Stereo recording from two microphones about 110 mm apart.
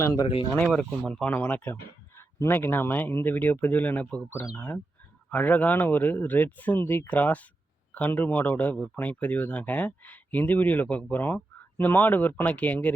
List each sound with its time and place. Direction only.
0.0 s speech: 30° left (ahead or behind)
0.5 s speech: 5° left (ahead or behind)